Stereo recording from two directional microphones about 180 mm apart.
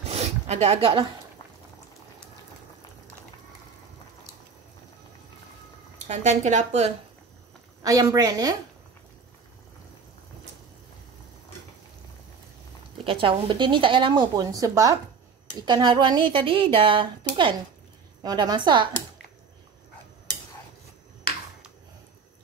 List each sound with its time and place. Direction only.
0.0 s a sound: 35° right (ahead or behind)
5.9 s a woman's voice: 40° right (ahead or behind)
7.8 s a woman's voice: 20° right (ahead or behind)
12.9 s a woman's voice: 30° right (ahead or behind)